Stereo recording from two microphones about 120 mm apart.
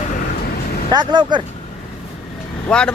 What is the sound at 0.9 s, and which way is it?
Speech, 40° right (ahead or behind).